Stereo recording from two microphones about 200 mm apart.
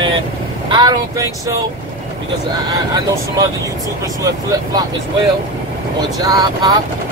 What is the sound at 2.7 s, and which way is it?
Speech, 20° right (ahead or behind).